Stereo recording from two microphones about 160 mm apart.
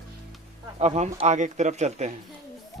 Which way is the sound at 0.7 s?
45° right (ahead or behind).